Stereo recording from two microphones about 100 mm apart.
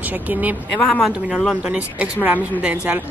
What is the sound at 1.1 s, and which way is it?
A woman's voice, 10° right (ahead or behind).